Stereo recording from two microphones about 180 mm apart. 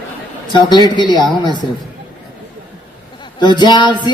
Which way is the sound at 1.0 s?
25° left (ahead or behind).